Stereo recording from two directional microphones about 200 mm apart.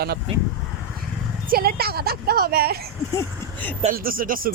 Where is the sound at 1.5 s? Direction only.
50° right (ahead or behind).